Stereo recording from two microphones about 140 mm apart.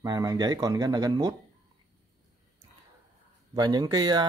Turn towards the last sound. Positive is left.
turn(degrees=-30)  # may be behind; listen again after turning